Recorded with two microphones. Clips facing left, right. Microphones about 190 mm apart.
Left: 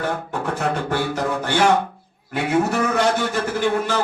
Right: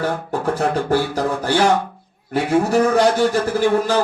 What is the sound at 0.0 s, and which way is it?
A man's voice, 35° right (ahead or behind).